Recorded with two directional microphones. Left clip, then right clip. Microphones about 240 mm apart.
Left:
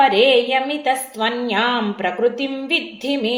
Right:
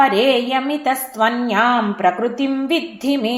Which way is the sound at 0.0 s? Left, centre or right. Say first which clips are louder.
Left 1 dB; right.